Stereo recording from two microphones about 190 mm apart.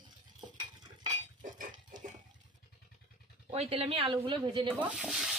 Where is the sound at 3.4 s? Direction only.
30° right (ahead or behind).